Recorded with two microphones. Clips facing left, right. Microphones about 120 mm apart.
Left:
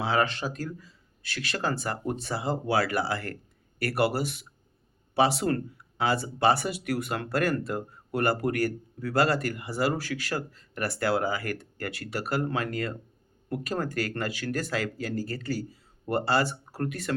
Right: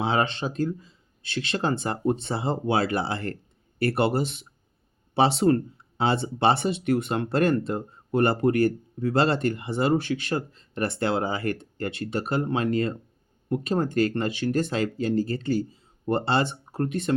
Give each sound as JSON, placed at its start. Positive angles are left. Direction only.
{"t": 0.0, "sound": "speech", "side_deg": -25}